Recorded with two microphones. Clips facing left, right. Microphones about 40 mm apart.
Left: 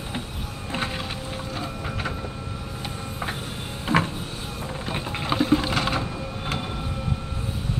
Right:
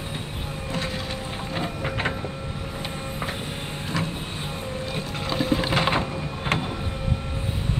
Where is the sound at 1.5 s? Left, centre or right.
Right.